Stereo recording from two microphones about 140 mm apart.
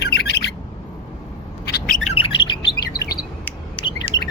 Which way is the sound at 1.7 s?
90° left.